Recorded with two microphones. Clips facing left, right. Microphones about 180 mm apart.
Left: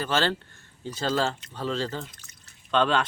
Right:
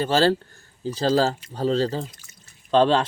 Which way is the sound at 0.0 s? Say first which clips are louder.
Right 7 dB; 35° right (ahead or behind).